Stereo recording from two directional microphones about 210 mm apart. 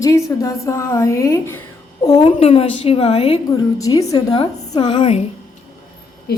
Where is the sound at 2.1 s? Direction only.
30° left (ahead or behind).